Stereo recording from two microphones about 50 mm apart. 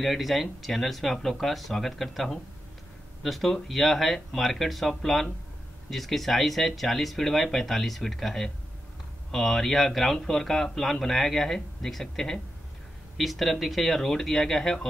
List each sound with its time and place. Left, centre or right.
0.0 s speech: centre